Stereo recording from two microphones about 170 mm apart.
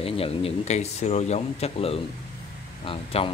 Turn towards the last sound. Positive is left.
turn(degrees=35)  # may be behind; listen again after turning